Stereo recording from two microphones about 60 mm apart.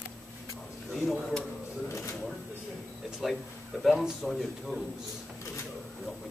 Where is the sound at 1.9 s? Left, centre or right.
Left.